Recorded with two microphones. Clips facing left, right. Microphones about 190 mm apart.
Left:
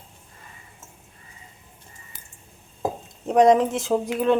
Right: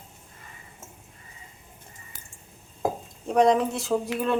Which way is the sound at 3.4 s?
20° left (ahead or behind).